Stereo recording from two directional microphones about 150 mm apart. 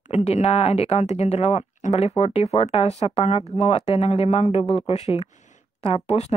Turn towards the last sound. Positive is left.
turn(degrees=45)  # may be behind; listen again after turning